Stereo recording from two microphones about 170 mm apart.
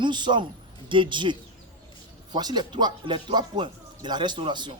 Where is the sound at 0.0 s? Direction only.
25° right (ahead or behind).